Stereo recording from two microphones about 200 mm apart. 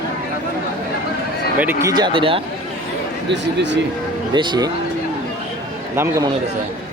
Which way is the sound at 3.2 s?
60° right (ahead or behind).